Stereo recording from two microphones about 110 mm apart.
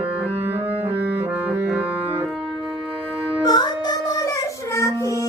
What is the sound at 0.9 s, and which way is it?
Music, 15° right (ahead or behind).